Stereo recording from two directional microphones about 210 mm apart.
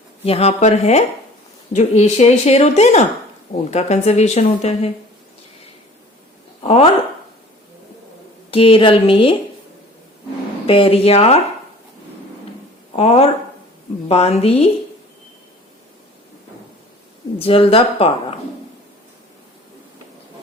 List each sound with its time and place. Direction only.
0.3 s speech: 30° left (ahead or behind)
6.6 s speech: 30° left (ahead or behind)
8.4 s speech: 25° left (ahead or behind)
10.7 s speech: 25° left (ahead or behind)
13.0 s speech: 30° left (ahead or behind)
17.3 s speech: 25° left (ahead or behind)